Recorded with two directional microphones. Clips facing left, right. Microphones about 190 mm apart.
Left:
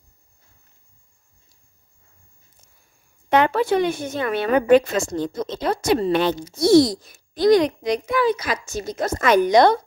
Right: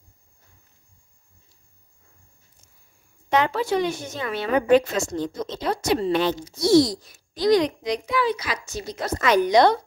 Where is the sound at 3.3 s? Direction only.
60° left (ahead or behind).